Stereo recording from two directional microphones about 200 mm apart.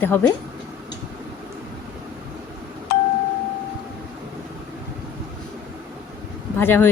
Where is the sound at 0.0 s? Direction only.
10° left (ahead or behind).